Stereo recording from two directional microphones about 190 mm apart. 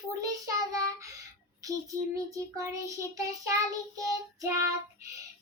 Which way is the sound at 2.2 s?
15° right (ahead or behind).